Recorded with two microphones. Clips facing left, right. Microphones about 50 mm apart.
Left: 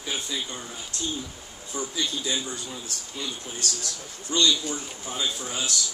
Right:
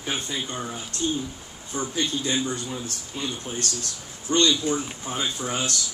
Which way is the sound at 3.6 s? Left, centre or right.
Right.